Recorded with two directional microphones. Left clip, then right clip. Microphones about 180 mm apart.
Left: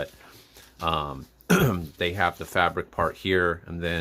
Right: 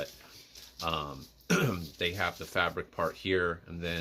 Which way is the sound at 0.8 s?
40° left (ahead or behind).